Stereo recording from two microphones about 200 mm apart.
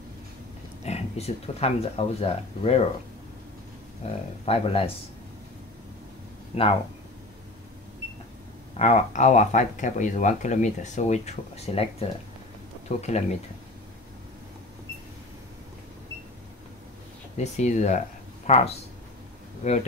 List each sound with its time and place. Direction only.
0.8 s speech: 30° left (ahead or behind)
4.0 s speech: 35° left (ahead or behind)
6.5 s speech: 30° left (ahead or behind)
8.7 s speech: 35° left (ahead or behind)
17.4 s speech: 35° left (ahead or behind)